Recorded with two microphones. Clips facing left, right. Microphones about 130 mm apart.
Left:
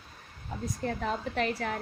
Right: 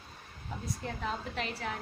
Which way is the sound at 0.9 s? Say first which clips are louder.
Left 5 dB; 50° left (ahead or behind).